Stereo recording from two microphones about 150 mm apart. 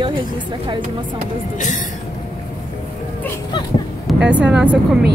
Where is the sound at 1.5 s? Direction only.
55° left (ahead or behind).